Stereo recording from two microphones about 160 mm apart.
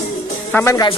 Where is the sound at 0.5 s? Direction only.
20° left (ahead or behind).